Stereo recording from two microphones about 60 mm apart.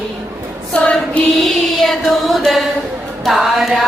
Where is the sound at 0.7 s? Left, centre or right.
Left.